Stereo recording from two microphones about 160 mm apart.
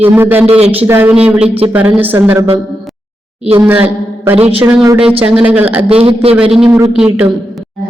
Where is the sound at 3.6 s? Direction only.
10° right (ahead or behind).